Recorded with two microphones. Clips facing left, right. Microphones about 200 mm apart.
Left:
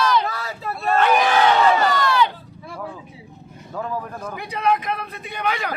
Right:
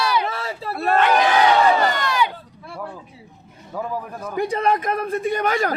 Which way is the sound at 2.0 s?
15° right (ahead or behind).